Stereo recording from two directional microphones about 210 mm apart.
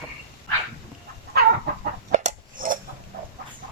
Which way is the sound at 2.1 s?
40° right (ahead or behind).